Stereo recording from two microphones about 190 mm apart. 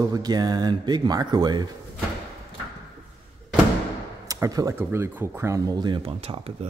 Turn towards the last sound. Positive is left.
turn(degrees=-30)  # may be behind; listen again after turning